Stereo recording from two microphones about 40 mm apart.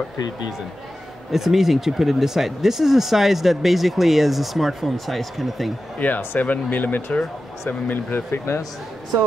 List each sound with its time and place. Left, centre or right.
1.3 s speech: centre
5.9 s speech: left
8.1 s speech: left